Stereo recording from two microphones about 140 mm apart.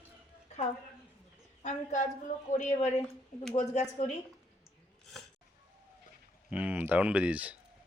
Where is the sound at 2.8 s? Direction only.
55° left (ahead or behind).